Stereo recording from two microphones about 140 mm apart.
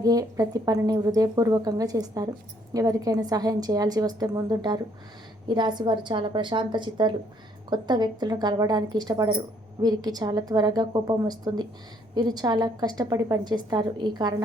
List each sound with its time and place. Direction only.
0.0 s a woman's voice: 25° right (ahead or behind)